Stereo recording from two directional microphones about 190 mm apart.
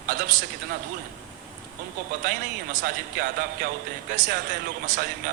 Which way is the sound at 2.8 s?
50° right (ahead or behind).